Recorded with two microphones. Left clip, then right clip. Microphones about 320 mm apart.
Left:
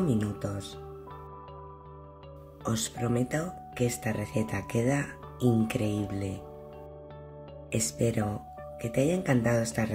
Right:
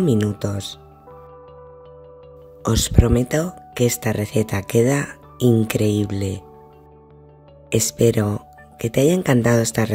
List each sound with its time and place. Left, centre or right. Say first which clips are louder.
0.0 s speech: right 10 dB; right
2.6 s speech: right 12 dB; right
7.7 s speech: right 12 dB; right